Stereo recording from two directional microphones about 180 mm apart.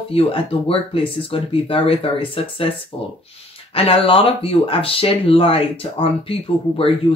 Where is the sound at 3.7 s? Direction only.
30° left (ahead or behind).